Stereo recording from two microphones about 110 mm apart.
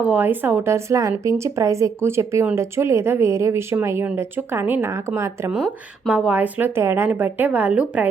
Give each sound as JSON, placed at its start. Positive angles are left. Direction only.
{"t": 0.0, "sound": "a woman's voice", "side_deg": -15}
{"t": 6.1, "sound": "a woman's voice", "side_deg": -10}